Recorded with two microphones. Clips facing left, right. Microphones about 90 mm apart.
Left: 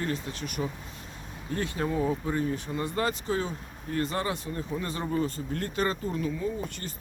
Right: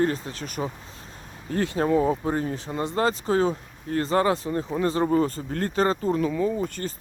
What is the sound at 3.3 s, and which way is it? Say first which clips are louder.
Speech: right 8 dB; 45° right (ahead or behind).